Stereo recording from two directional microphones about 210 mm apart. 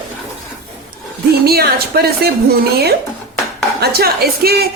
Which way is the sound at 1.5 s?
50° right (ahead or behind).